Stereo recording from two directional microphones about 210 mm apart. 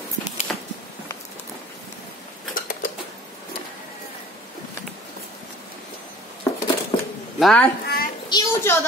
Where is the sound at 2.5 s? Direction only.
40° left (ahead or behind).